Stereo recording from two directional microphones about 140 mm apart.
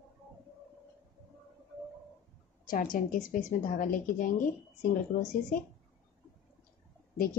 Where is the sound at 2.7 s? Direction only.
75° left (ahead or behind).